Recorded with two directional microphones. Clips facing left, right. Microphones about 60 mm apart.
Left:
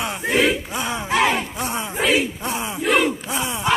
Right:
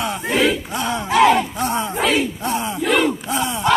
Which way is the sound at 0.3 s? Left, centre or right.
Centre.